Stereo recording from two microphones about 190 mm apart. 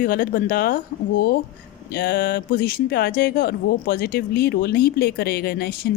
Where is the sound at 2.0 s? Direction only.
50° left (ahead or behind).